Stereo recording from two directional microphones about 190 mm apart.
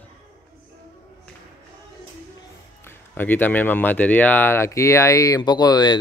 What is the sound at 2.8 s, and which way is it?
A man's voice, 10° left (ahead or behind).